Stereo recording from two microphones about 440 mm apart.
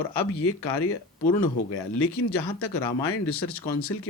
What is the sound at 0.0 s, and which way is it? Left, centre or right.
Speech, left.